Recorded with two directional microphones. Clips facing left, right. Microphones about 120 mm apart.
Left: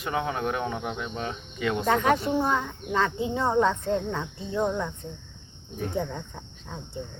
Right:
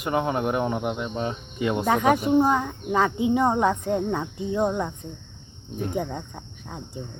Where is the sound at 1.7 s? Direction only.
15° right (ahead or behind).